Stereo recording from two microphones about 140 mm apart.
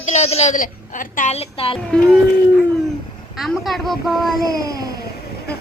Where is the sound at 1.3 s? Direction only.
45° left (ahead or behind).